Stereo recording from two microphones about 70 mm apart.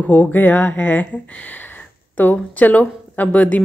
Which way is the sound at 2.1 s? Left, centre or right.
Left.